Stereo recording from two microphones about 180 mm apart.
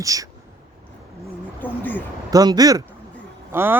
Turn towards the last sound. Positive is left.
turn(degrees=-10)  # may be behind; listen again after turning